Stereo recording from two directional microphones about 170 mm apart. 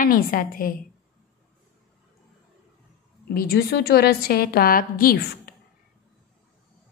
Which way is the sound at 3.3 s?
60° left (ahead or behind).